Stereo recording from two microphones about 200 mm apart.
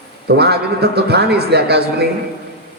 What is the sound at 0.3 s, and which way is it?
A man's voice, 55° right (ahead or behind).